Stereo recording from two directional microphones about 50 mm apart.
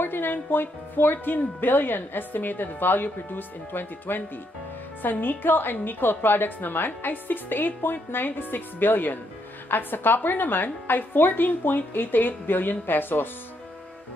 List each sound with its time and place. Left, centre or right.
0.0 s speech: left